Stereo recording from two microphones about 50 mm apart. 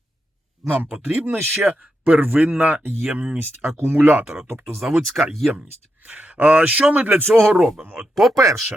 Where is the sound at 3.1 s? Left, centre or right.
Centre.